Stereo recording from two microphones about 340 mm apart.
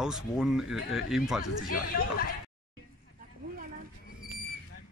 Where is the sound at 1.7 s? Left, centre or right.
Left.